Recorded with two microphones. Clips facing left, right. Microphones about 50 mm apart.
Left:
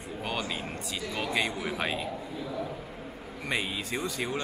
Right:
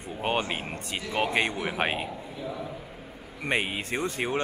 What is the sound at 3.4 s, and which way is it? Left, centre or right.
Speech, right.